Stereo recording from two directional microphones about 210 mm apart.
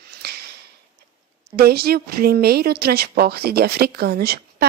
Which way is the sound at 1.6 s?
45° right (ahead or behind).